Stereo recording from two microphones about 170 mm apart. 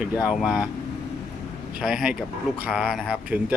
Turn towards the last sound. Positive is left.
turn(degrees=-5)  # may be behind; listen again after turning